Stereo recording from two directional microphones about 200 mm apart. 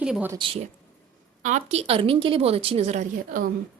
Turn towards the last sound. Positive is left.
turn(degrees=-40)  # may be behind; listen again after turning